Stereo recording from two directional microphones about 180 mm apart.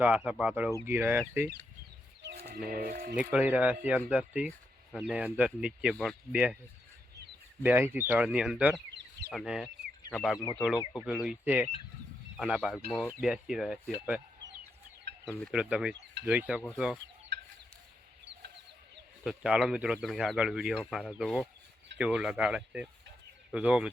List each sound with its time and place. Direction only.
0.0 s speech: 10° right (ahead or behind)
2.6 s speech: 55° right (ahead or behind)
3.3 s speech: 10° right (ahead or behind)
7.6 s speech: 10° right (ahead or behind)
8.9 s bird: 80° right
9.3 s speech: centre (ahead or behind)
15.3 s speech: 5° right (ahead or behind)
17.3 s chicken: 75° right (ahead or behind)
19.2 s speech: 5° right (ahead or behind)